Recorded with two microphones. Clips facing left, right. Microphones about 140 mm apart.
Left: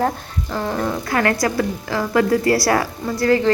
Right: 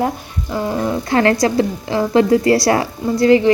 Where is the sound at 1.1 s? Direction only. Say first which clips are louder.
Right 5 dB; 25° right (ahead or behind).